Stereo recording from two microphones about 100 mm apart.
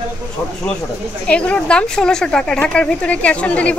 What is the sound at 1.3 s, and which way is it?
Speech, 10° left (ahead or behind).